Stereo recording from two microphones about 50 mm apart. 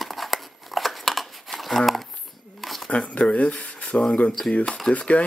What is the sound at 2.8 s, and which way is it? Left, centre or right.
Speech, left.